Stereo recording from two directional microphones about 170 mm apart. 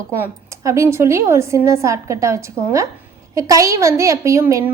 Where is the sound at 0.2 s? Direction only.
15° right (ahead or behind).